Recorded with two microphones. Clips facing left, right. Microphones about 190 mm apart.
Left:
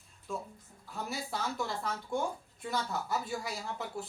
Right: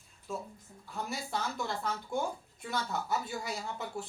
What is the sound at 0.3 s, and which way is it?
Speech, 5° right (ahead or behind).